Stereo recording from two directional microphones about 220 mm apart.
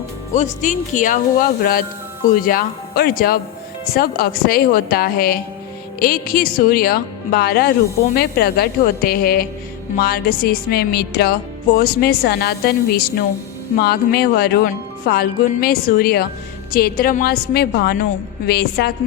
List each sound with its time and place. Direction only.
0.3 s speech: 35° left (ahead or behind)
3.9 s music: 45° left (ahead or behind)